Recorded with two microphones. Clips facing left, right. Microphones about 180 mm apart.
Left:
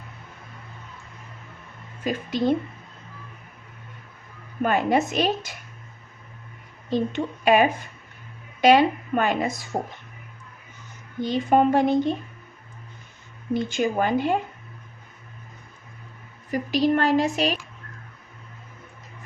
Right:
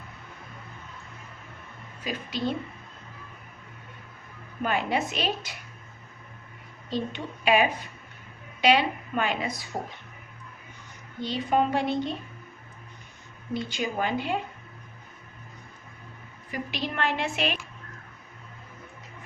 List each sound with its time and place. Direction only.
2.0 s a woman's voice: 50° left (ahead or behind)
4.6 s a woman's voice: 45° left (ahead or behind)
6.9 s a woman's voice: 45° left (ahead or behind)
11.2 s a woman's voice: 45° left (ahead or behind)
13.5 s a woman's voice: 50° left (ahead or behind)
16.5 s a woman's voice: 40° left (ahead or behind)